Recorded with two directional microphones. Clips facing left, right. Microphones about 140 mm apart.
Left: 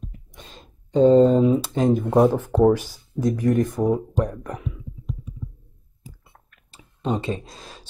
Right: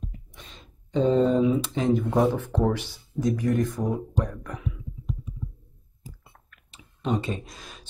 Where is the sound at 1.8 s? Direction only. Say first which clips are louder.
Left 6 dB; 45° left (ahead or behind).